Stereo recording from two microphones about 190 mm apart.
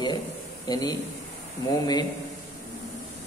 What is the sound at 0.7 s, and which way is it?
Speech, 20° left (ahead or behind).